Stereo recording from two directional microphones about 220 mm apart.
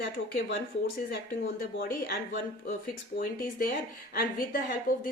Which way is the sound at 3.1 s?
40° left (ahead or behind).